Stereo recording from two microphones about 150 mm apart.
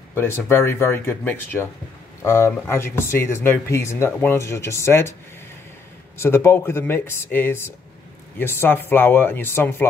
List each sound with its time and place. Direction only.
0.1 s speech: 15° left (ahead or behind)
6.1 s speech: 15° left (ahead or behind)